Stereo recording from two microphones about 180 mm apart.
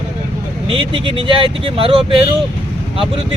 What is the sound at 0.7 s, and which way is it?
Speech, 30° right (ahead or behind).